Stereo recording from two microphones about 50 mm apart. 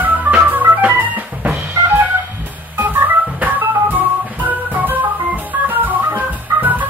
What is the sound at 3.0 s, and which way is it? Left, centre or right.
Organ, right.